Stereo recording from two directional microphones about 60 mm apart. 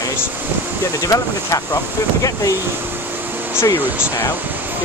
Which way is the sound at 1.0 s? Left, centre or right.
Left.